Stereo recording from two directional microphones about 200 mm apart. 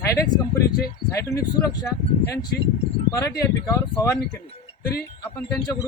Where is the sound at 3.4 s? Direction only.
15° left (ahead or behind).